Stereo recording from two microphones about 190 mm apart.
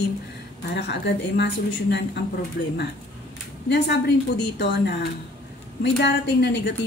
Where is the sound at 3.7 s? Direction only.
60° left (ahead or behind).